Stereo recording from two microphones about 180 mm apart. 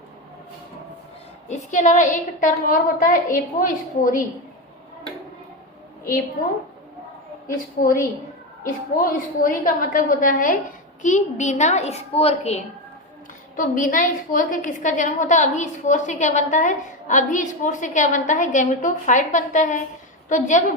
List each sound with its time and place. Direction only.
1.5 s a woman's voice: 40° left (ahead or behind)
7.4 s a woman's voice: 50° left (ahead or behind)
9.0 s a woman's voice: 50° left (ahead or behind)
13.6 s a woman's voice: 45° left (ahead or behind)